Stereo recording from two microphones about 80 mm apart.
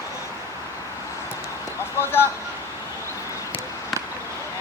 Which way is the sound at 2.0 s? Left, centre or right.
Left.